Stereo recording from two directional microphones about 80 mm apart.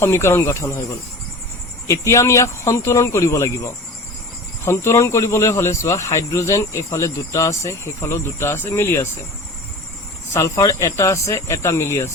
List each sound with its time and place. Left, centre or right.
0.0 s speech: left
10.3 s speech: left